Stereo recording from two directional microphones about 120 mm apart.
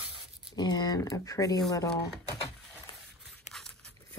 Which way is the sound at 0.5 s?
35° left (ahead or behind).